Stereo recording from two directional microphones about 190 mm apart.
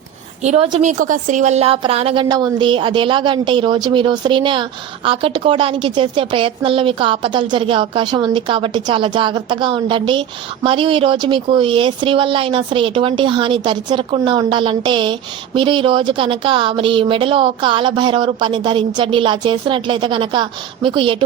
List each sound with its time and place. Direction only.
0.4 s a woman's voice: 30° right (ahead or behind)